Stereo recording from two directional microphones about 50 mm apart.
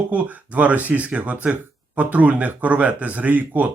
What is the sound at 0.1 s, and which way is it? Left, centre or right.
Speech, right.